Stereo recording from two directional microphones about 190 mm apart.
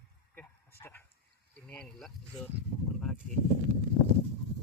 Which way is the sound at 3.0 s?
Centre (ahead or behind).